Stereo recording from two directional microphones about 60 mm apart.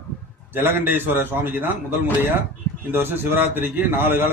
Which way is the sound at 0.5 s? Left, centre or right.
Right.